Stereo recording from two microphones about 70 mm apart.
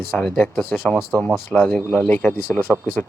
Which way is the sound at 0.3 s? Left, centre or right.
Left.